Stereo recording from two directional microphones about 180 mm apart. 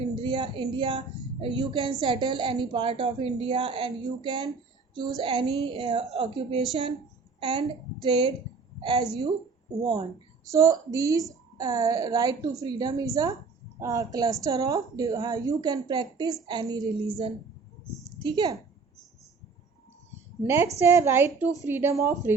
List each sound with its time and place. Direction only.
0.2 s a woman's voice: 25° right (ahead or behind)
10.4 s a woman's voice: 20° right (ahead or behind)
18.2 s a woman's voice: 25° right (ahead or behind)
20.4 s a woman's voice: 10° right (ahead or behind)